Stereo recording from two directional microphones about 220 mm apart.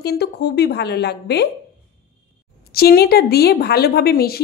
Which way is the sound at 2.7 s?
45° left (ahead or behind).